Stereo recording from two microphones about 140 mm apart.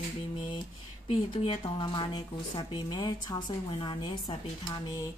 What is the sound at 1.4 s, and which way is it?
A woman's voice, 35° left (ahead or behind).